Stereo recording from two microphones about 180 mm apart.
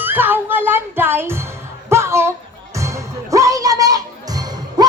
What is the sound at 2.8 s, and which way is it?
Music, 15° right (ahead or behind).